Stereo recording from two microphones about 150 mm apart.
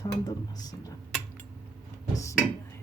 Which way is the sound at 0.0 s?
25° left (ahead or behind).